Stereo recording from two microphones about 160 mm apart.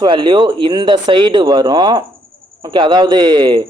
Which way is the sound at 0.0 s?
30° right (ahead or behind).